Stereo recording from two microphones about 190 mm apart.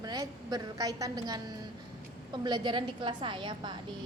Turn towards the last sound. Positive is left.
turn(degrees=-25)  # may be behind; listen again after turning